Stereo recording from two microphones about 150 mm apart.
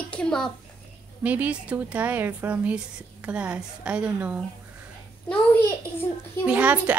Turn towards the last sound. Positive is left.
turn(degrees=-10)  # may be behind; listen again after turning